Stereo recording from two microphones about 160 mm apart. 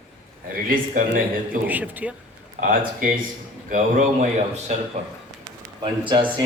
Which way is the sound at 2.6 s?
60° right (ahead or behind).